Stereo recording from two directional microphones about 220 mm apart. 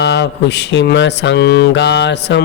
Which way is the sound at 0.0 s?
50° left (ahead or behind).